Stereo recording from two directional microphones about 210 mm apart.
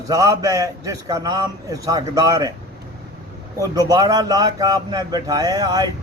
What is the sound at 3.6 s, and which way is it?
Speech, 15° right (ahead or behind).